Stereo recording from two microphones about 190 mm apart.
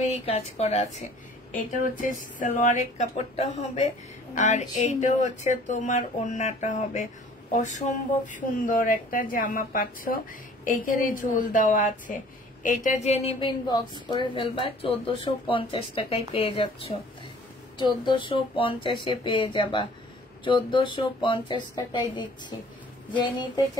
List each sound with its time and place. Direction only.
0.0 s a woman's voice: 35° left (ahead or behind)